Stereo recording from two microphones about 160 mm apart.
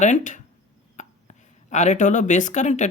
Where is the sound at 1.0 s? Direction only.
45° left (ahead or behind).